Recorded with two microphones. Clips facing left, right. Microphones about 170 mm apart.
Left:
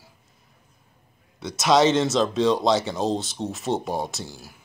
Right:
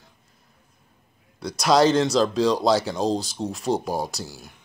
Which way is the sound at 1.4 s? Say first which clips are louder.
Even; centre (ahead or behind).